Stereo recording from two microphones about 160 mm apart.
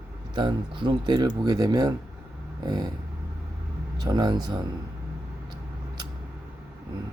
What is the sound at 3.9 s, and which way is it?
Speech, 25° right (ahead or behind).